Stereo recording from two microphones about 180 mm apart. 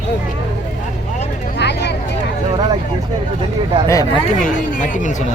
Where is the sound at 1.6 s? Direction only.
70° left (ahead or behind).